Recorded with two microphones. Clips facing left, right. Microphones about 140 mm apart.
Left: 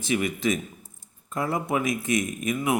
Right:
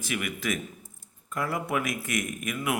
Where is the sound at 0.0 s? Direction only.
25° left (ahead or behind).